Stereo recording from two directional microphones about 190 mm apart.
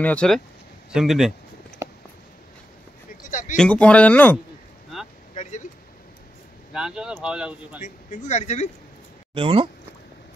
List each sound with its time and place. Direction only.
0.0 s speech: 5° left (ahead or behind)
3.2 s a sound: 40° left (ahead or behind)
3.5 s speech: 5° left (ahead or behind)
5.3 s vehicle: 40° left (ahead or behind)
6.7 s speech: 5° right (ahead or behind)
7.8 s speech: 40° left (ahead or behind)
9.3 s speech: 30° right (ahead or behind)